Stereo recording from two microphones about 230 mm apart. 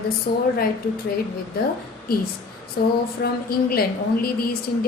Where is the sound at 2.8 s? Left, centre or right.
Left.